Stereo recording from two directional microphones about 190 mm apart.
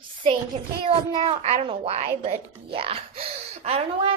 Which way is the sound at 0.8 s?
30° right (ahead or behind).